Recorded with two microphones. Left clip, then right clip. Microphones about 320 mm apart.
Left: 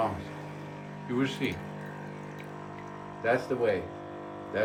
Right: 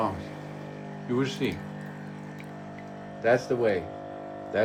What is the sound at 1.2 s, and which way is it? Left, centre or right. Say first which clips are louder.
Speech: even; centre.